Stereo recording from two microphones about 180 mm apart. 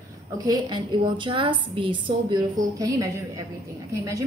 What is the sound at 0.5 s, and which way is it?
A woman's voice, 25° right (ahead or behind).